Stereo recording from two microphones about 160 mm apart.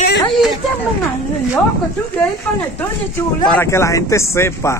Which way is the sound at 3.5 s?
15° left (ahead or behind).